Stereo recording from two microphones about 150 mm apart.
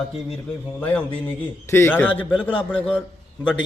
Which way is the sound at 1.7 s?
15° left (ahead or behind).